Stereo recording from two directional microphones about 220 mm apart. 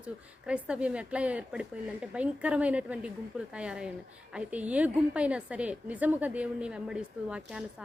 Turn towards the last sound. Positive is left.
turn(degrees=-5)  # may be behind; listen again after turning